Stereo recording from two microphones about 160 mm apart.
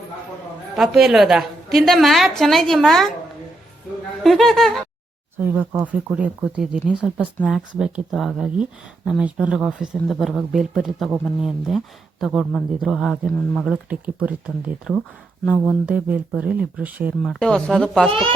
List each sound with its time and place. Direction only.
0.8 s a man's voice: centre (ahead or behind)
4.2 s speech: centre (ahead or behind)
5.4 s a man's voice: 10° right (ahead or behind)
17.2 s a man's voice: centre (ahead or behind)
18.1 s speech: 35° right (ahead or behind)